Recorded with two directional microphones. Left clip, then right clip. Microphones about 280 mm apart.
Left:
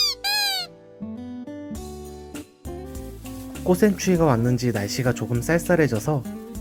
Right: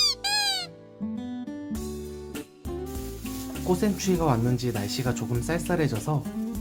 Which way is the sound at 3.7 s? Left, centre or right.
Left.